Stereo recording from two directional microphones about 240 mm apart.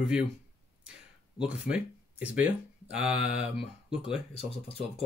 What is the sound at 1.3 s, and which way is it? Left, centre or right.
Speech, centre.